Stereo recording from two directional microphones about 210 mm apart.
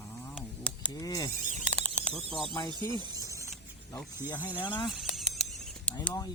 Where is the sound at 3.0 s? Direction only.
15° right (ahead or behind).